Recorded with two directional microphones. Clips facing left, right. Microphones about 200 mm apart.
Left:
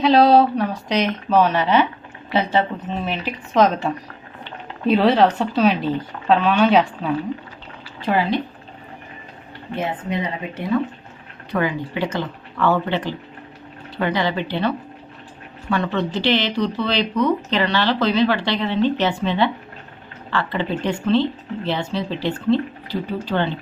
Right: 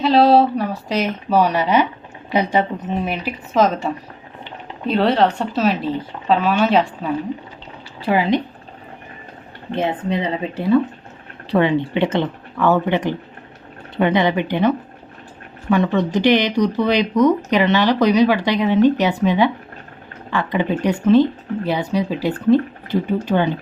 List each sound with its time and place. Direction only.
0.0 s speech: centre (ahead or behind)
3.5 s speech: centre (ahead or behind)
8.0 s speech: 15° right (ahead or behind)
9.7 s speech: 30° right (ahead or behind)
12.5 s speech: 15° right (ahead or behind)